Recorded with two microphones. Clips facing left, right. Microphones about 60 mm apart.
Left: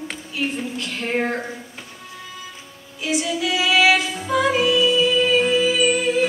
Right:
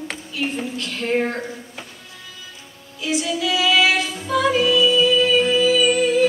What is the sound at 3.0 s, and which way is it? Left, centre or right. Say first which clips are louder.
Music: even; left.